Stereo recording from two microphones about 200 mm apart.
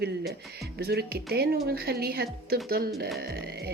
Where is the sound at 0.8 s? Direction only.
55° right (ahead or behind).